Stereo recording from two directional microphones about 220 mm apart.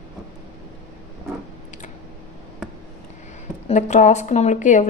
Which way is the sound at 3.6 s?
30° left (ahead or behind).